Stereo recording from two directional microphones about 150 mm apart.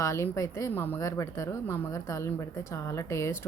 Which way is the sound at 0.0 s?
20° left (ahead or behind).